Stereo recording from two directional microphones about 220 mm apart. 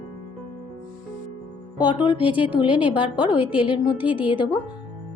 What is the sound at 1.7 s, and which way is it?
Speech, 20° left (ahead or behind).